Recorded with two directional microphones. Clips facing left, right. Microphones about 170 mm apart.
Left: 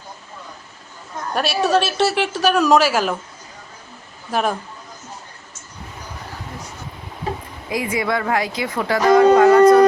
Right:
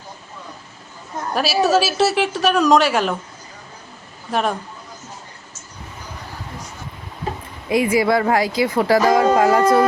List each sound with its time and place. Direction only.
1.3 s speech: centre (ahead or behind)
4.3 s speech: centre (ahead or behind)
7.7 s speech: 25° right (ahead or behind)